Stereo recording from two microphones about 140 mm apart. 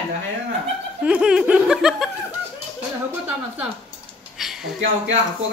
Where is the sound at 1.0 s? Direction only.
5° right (ahead or behind).